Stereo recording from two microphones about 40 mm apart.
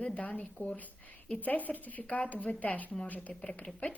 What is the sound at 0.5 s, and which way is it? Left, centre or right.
Speech, left.